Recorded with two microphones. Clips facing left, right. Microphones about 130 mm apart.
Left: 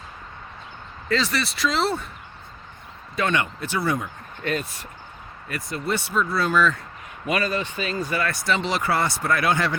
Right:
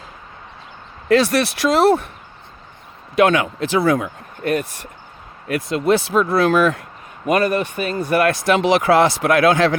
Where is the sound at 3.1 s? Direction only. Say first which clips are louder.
Right 9 dB; 80° right.